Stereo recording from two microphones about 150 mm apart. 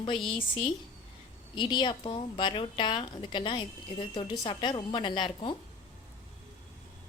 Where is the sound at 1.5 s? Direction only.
30° left (ahead or behind).